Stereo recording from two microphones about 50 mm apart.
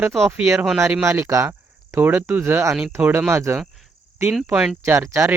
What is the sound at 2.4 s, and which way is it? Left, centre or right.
Speech, right.